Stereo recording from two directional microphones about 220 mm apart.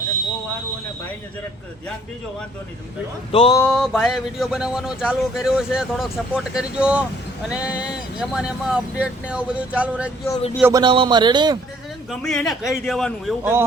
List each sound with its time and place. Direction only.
3.3 s speech: 25° left (ahead or behind)
3.6 s speech: centre (ahead or behind)
10.6 s a man's voice: 15° right (ahead or behind)
12.2 s speech: centre (ahead or behind)
13.4 s speech: 10° right (ahead or behind)